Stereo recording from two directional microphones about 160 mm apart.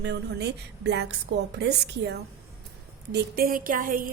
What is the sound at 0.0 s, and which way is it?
A woman's voice, 90° right.